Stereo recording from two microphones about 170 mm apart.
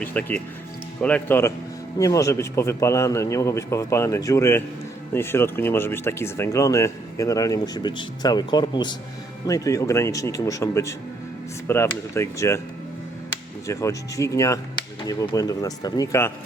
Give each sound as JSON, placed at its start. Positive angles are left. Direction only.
{"t": 0.0, "sound": "a man's voice", "side_deg": 10}
{"t": 13.7, "sound": "speech", "side_deg": 20}